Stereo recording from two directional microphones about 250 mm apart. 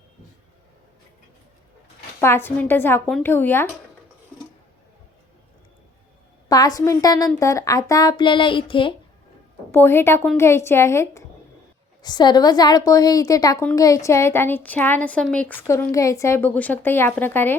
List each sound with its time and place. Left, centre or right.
2.2 s a woman's voice: centre
6.5 s a woman's voice: centre
9.7 s a woman's voice: centre